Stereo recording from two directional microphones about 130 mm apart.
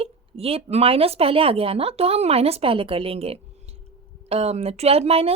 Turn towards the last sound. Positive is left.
turn(degrees=-50)  # may be behind; listen again after turning